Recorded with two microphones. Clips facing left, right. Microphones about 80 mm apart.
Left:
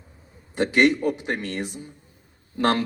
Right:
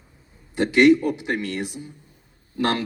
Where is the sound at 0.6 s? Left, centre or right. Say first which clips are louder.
Right 4 dB; left.